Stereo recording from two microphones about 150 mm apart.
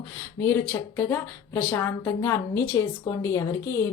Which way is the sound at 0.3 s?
15° left (ahead or behind).